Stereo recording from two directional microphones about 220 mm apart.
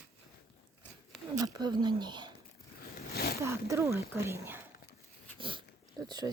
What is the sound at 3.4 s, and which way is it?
A woman's voice, 15° right (ahead or behind).